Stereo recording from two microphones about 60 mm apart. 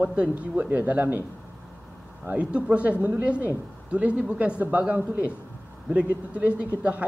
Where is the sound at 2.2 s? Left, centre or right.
Right.